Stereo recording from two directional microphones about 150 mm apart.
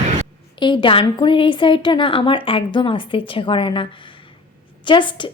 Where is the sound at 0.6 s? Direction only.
30° left (ahead or behind).